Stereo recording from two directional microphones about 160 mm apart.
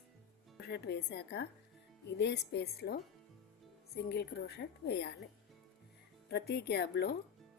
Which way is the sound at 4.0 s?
90° left.